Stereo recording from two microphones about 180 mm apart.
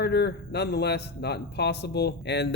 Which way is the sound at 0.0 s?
65° left (ahead or behind).